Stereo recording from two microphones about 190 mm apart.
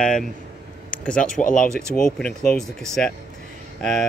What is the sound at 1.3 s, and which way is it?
Speech, 45° left (ahead or behind).